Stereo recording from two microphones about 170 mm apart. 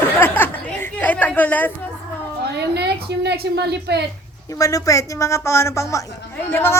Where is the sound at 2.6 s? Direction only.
75° right (ahead or behind).